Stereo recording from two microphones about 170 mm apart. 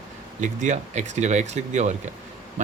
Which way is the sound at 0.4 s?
45° right (ahead or behind).